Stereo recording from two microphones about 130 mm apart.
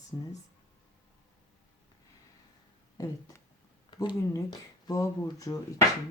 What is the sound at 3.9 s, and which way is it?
Speech, 35° left (ahead or behind).